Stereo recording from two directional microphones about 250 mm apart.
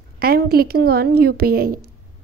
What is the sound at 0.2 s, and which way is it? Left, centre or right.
A woman's voice, right.